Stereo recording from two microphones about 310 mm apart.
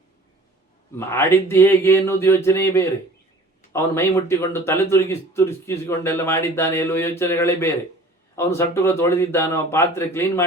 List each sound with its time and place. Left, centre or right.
0.9 s a man's voice: centre